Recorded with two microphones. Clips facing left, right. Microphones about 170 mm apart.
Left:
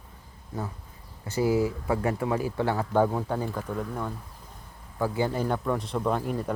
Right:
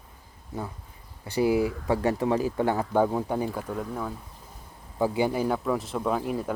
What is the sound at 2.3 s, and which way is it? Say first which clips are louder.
Speech: right 2 dB; 15° right (ahead or behind).